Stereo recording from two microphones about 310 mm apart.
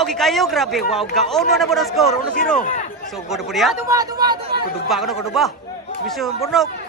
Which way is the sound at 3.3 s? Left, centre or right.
Centre.